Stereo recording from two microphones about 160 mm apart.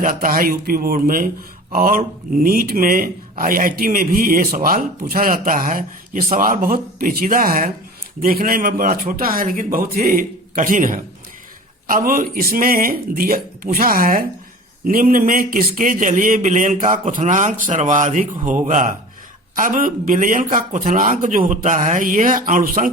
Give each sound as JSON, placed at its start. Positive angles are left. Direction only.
{"t": 0.0, "sound": "speech", "side_deg": -60}